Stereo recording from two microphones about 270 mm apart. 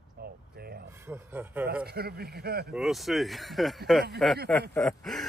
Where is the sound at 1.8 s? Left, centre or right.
Right.